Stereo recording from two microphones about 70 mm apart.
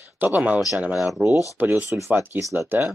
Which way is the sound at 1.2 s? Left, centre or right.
Centre.